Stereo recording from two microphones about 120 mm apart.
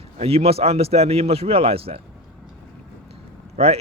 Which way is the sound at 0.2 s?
55° right (ahead or behind).